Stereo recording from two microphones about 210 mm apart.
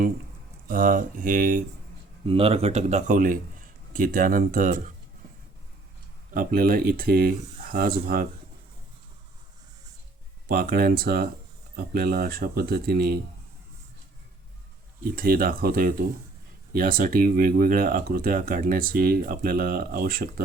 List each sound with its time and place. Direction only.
0.7 s speech: 40° right (ahead or behind)
2.2 s speech: 25° right (ahead or behind)
6.3 s speech: 40° right (ahead or behind)
10.5 s speech: 45° right (ahead or behind)
15.0 s speech: 45° right (ahead or behind)